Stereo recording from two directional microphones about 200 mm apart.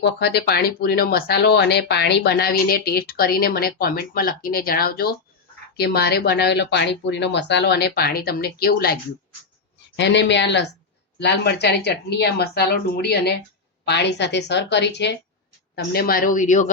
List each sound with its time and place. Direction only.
0.0 s speech: 55° left (ahead or behind)
9.9 s a woman's voice: 60° left (ahead or behind); by 16.7 s 40° left (ahead or behind)